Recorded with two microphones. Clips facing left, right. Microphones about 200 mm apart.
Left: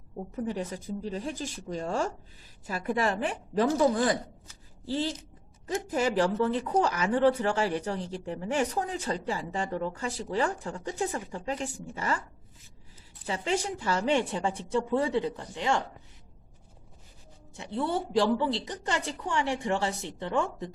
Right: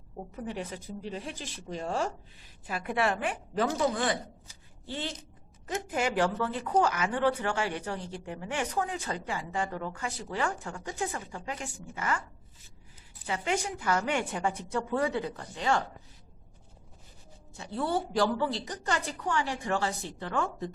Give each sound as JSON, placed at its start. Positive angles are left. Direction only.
{"t": 0.3, "sound": "speech", "side_deg": 40}
{"t": 13.2, "sound": "a woman's voice", "side_deg": 30}
{"t": 17.6, "sound": "a woman's voice", "side_deg": 20}